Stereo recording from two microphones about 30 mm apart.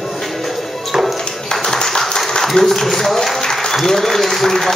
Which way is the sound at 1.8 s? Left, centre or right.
Centre.